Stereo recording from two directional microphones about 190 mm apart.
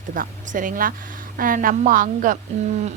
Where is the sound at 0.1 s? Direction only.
45° right (ahead or behind).